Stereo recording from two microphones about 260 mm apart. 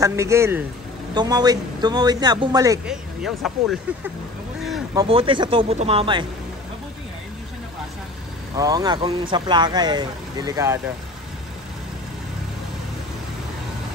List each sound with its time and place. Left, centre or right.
0.0 s speech: centre
2.9 s speech: centre
4.9 s speech: right
8.5 s speech: centre